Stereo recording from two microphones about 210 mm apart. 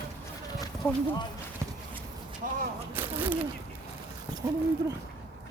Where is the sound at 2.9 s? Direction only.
10° right (ahead or behind).